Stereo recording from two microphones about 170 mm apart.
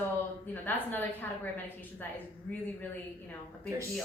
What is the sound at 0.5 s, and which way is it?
A woman's voice, 10° left (ahead or behind).